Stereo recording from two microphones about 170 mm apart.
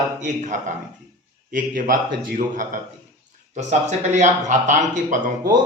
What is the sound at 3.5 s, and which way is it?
Speech, 45° right (ahead or behind).